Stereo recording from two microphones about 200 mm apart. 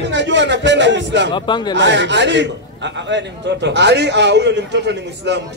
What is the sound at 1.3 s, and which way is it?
Speech, 25° left (ahead or behind).